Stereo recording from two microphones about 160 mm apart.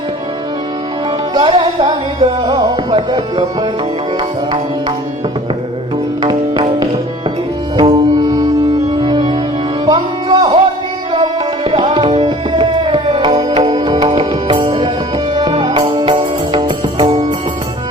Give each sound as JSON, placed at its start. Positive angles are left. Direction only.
{"t": 1.3, "sound": "music", "side_deg": -30}
{"t": 6.2, "sound": "music", "side_deg": -25}
{"t": 11.1, "sound": "tabla", "side_deg": -35}
{"t": 13.7, "sound": "music", "side_deg": -25}